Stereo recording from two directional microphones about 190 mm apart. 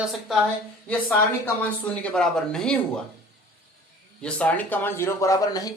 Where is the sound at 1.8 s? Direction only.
5° left (ahead or behind).